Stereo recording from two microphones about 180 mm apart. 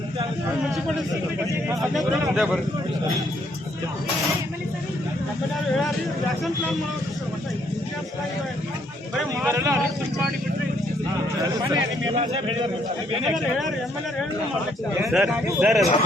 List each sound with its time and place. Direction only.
1.8 s speech: centre (ahead or behind)
9.5 s speech: 15° right (ahead or behind)
11.4 s a man's voice: 20° right (ahead or behind)
15.0 s speech: 5° right (ahead or behind)